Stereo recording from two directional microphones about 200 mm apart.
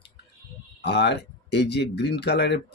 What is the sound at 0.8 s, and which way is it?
Speech, 55° left (ahead or behind).